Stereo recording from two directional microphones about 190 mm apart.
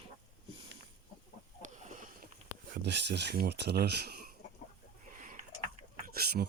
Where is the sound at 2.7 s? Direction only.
65° right (ahead or behind).